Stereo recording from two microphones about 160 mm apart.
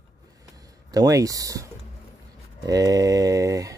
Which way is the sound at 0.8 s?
25° right (ahead or behind).